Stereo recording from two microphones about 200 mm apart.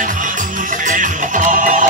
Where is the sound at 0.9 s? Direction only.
40° right (ahead or behind).